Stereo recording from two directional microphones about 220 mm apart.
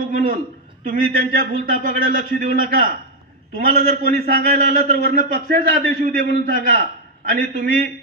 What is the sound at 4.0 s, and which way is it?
Speech, 45° right (ahead or behind).